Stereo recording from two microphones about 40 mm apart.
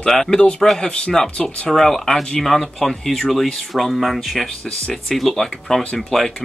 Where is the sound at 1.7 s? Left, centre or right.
Centre.